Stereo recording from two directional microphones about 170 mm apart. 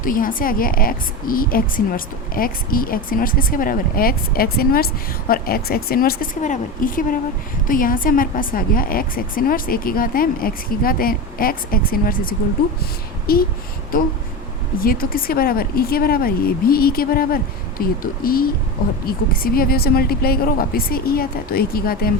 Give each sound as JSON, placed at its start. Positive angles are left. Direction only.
{"t": 0.0, "sound": "a woman's voice", "side_deg": 55}